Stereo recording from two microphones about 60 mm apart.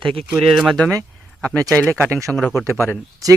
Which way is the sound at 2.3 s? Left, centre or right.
Centre.